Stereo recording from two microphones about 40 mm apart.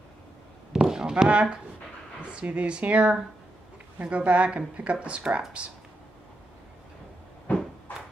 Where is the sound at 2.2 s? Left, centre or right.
Right.